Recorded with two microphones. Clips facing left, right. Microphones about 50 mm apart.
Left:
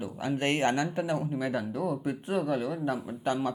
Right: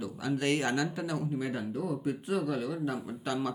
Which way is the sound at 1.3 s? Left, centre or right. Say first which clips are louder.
Left 3 dB; left.